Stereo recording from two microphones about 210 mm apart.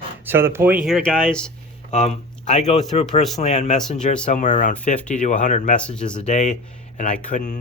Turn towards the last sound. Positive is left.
turn(degrees=35)  # may be behind; listen again after turning